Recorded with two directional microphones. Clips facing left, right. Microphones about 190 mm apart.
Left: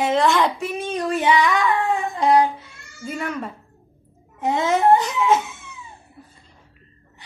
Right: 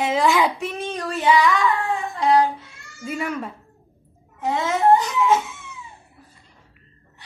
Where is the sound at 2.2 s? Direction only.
20° left (ahead or behind).